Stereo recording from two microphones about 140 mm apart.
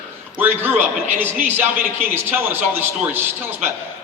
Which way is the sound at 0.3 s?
15° right (ahead or behind).